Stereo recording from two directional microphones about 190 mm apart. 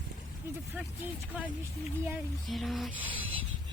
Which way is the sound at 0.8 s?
10° right (ahead or behind).